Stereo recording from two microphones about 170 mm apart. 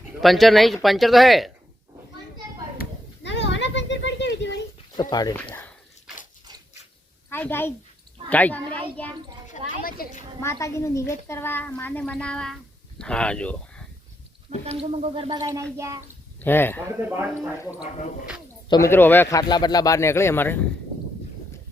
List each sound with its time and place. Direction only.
0.2 s speech: centre (ahead or behind)
3.2 s children playing: 90° left
5.0 s speech: 20° left (ahead or behind)
5.4 s speech: 10° left (ahead or behind)
7.3 s a woman's voice: 10° left (ahead or behind)
9.5 s a woman's voice: 55° left (ahead or behind)
10.4 s speech: 15° left (ahead or behind)
14.6 s speech: 35° right (ahead or behind)
15.3 s speech: 20° right (ahead or behind)
16.4 s speech: 10° left (ahead or behind)
17.1 s speech: 10° right (ahead or behind)
18.7 s speech: 15° left (ahead or behind)